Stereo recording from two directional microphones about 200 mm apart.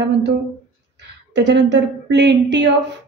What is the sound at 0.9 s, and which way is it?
A woman's voice, 60° right (ahead or behind).